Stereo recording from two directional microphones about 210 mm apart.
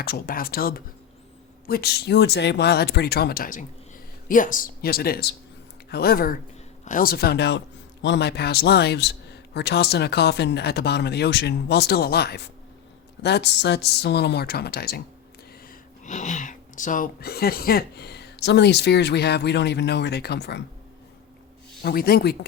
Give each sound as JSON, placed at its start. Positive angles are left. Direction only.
{"t": 0.0, "sound": "speech", "side_deg": 45}
{"t": 16.0, "sound": "speech", "side_deg": 35}
{"t": 21.8, "sound": "speech", "side_deg": 45}